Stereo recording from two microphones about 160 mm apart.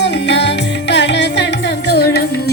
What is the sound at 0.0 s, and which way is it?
Music, 90° left.